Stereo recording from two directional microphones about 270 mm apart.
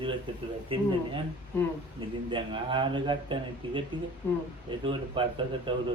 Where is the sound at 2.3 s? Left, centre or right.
Centre.